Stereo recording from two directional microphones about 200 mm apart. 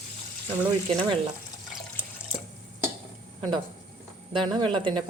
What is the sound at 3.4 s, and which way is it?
Speech, 20° right (ahead or behind).